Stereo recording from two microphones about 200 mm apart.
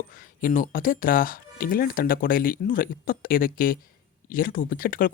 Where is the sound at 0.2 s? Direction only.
40° left (ahead or behind).